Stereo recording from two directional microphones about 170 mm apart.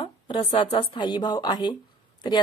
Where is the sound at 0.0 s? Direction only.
30° left (ahead or behind).